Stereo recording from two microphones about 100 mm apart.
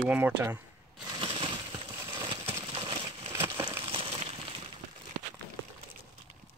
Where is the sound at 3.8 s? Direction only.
65° right (ahead or behind).